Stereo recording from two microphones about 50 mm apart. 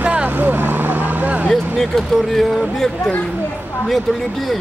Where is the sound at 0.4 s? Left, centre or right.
Right.